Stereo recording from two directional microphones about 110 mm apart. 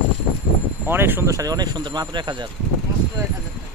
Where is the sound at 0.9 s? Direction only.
20° right (ahead or behind); by 2.5 s 45° right (ahead or behind).